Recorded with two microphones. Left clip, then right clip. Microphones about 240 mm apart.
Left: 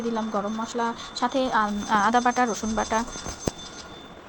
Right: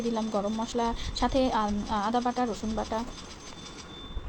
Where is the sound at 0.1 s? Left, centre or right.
Centre.